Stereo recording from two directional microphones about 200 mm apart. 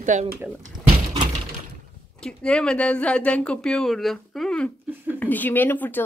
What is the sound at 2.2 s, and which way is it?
Speech, 5° left (ahead or behind).